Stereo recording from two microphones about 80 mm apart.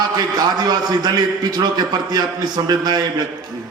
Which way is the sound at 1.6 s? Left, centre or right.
Right.